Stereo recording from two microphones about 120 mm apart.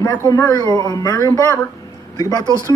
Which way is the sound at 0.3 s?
35° left (ahead or behind).